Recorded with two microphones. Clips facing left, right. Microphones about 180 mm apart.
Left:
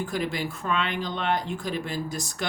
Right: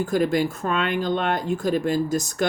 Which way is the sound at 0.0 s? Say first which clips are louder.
Right 8 dB; 45° right (ahead or behind).